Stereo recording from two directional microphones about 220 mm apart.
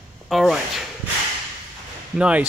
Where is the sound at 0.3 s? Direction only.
Centre (ahead or behind).